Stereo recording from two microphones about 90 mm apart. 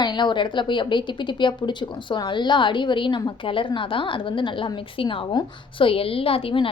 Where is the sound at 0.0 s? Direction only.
55° left (ahead or behind).